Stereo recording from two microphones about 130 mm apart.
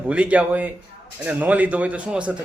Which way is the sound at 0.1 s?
10° right (ahead or behind).